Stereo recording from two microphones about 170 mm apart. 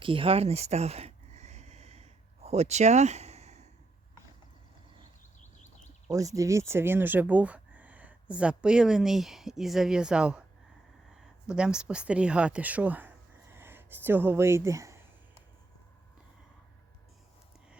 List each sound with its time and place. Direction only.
0.0 s a sound: 30° right (ahead or behind)
6.1 s speech: 20° right (ahead or behind)
11.4 s speech: 5° right (ahead or behind)